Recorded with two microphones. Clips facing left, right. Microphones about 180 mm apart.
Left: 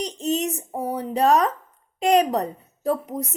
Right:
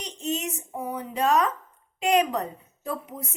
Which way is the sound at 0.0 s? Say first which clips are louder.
Left 6 dB; 35° left (ahead or behind).